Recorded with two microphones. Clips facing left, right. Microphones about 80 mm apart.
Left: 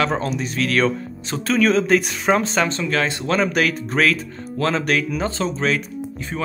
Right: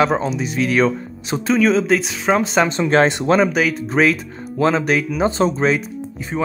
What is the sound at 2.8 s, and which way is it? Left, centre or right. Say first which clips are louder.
Speech: right 7 dB; right.